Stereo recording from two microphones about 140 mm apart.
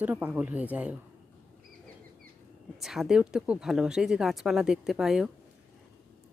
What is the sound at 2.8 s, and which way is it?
Speech, centre (ahead or behind).